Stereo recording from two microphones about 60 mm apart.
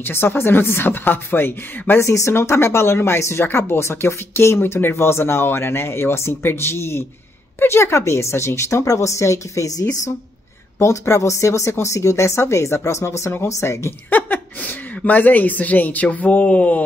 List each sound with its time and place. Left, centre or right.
0.0 s a woman's voice: left
2.0 s speech: left
10.8 s speech: left
14.1 s a sound: left
15.0 s speech: left